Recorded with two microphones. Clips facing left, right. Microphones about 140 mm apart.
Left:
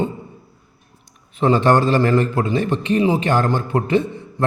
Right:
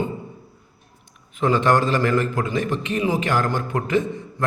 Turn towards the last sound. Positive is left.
turn(degrees=30)  # may be behind; listen again after turning